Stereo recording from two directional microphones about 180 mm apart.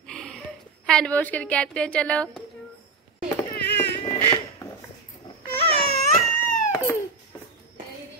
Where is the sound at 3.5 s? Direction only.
65° left (ahead or behind).